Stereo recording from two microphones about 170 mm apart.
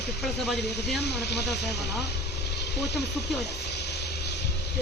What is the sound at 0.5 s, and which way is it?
Speech, 80° left.